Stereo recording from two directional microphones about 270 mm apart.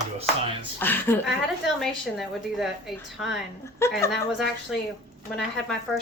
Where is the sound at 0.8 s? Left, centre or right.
Centre.